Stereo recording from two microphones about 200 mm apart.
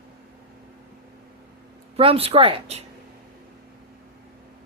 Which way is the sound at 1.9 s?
30° right (ahead or behind).